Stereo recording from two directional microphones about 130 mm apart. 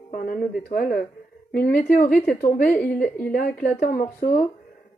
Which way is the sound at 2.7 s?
10° left (ahead or behind).